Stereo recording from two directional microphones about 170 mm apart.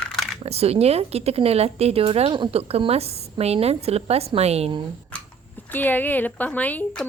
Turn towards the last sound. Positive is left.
turn(degrees=10)  # may be behind; listen again after turning